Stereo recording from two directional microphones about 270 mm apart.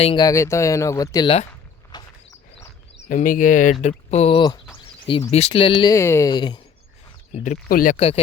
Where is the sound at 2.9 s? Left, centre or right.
Left.